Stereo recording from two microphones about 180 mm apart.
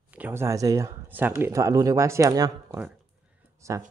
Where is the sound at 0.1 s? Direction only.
10° right (ahead or behind).